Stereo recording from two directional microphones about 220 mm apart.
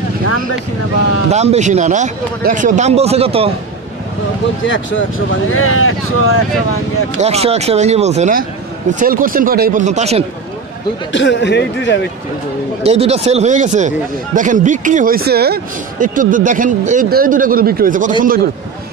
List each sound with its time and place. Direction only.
1.3 s speech: 30° right (ahead or behind)
4.6 s speech: 60° left (ahead or behind)
5.5 s speech: 70° left (ahead or behind)
7.2 s speech: 30° right (ahead or behind)
11.1 s speech: 55° left (ahead or behind)
12.8 s speech: 30° right (ahead or behind)